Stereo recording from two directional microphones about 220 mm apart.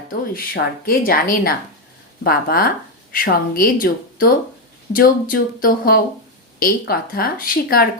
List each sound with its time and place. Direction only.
0.1 s speech: 45° left (ahead or behind)